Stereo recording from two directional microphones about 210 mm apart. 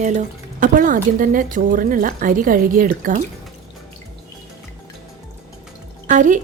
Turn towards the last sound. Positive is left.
turn(degrees=-35)  # may be behind; listen again after turning